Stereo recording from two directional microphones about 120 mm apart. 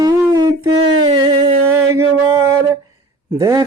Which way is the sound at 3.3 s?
30° right (ahead or behind).